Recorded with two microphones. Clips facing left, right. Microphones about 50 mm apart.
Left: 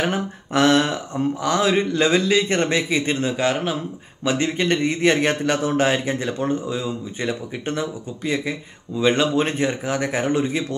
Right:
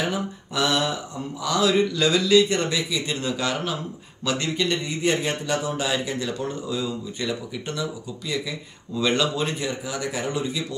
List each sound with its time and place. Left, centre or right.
0.1 s speech: left
3.3 s a man's voice: left
8.9 s a man's voice: left